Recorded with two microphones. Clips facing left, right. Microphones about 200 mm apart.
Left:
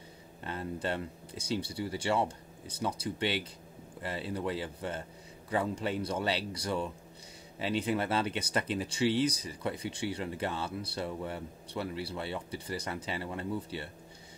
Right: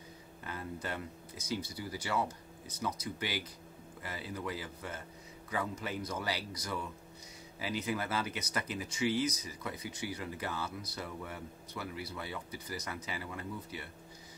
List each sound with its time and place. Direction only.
0.4 s speech: 30° left (ahead or behind)